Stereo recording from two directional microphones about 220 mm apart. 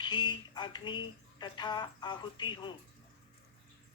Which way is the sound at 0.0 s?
20° left (ahead or behind).